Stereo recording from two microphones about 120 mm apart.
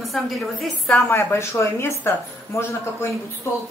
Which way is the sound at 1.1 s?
20° left (ahead or behind).